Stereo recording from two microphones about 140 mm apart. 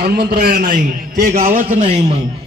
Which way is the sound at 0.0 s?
90° right.